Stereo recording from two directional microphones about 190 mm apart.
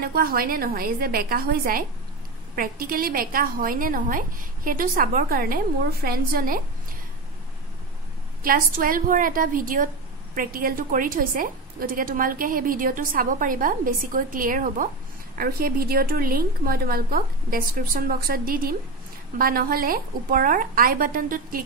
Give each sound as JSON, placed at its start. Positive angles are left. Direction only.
{"t": 0.0, "sound": "a woman's voice", "side_deg": -50}
{"t": 8.4, "sound": "a woman's voice", "side_deg": -50}